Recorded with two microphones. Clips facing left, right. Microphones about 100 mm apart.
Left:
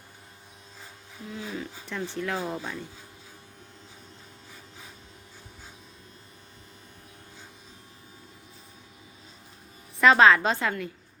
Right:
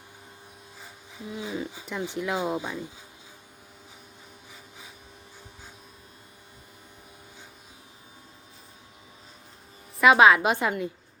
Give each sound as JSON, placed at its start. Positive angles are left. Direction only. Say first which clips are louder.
{"t": 1.3, "sound": "speech", "louder": "right 3 dB", "side_deg": -15}
{"t": 10.0, "sound": "speech", "louder": "right 1 dB", "side_deg": -10}